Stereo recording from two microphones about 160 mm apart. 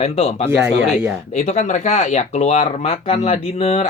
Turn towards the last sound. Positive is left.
turn(degrees=40)  # may be behind; listen again after turning